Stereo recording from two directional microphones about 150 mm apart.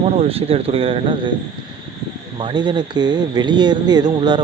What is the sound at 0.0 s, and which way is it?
Speech, 45° right (ahead or behind).